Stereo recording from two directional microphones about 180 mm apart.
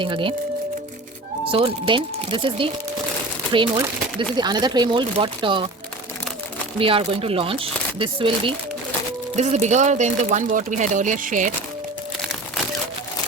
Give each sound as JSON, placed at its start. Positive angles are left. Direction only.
{"t": 0.0, "sound": "speech", "side_deg": -30}
{"t": 1.5, "sound": "speech", "side_deg": -30}
{"t": 6.7, "sound": "speech", "side_deg": -30}
{"t": 9.3, "sound": "speech", "side_deg": -40}